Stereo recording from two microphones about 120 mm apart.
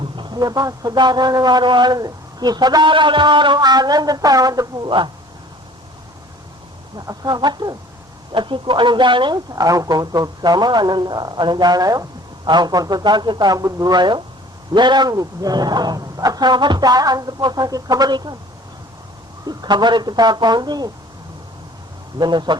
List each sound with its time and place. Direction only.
0.0 s speech: 40° right (ahead or behind)
4.9 s speech: 40° right (ahead or behind)
6.9 s speech: 30° right (ahead or behind)
19.5 s speech: 40° right (ahead or behind)
22.2 s speech: 40° right (ahead or behind)